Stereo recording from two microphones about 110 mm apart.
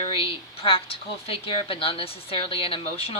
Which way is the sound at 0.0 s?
55° left (ahead or behind).